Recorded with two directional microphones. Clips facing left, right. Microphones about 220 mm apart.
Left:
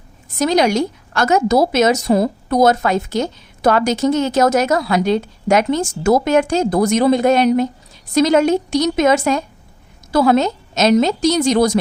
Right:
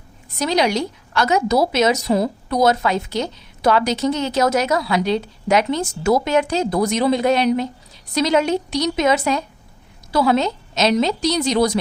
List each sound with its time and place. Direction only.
0.3 s a woman's voice: 50° left (ahead or behind)